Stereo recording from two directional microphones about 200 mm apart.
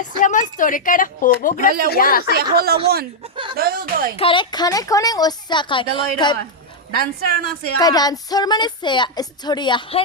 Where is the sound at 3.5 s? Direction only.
50° right (ahead or behind).